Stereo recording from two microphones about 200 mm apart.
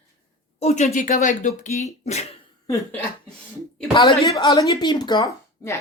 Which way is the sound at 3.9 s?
25° left (ahead or behind).